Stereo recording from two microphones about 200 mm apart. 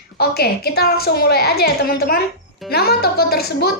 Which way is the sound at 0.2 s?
50° left (ahead or behind).